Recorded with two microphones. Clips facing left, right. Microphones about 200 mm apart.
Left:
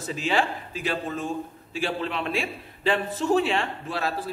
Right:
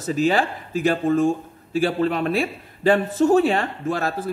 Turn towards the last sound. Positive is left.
turn(degrees=-45)  # may be behind; listen again after turning